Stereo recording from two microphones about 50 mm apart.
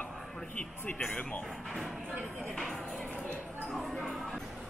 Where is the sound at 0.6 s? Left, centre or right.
Left.